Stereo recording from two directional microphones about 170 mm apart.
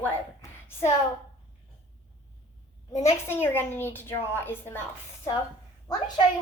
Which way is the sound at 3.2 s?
15° left (ahead or behind).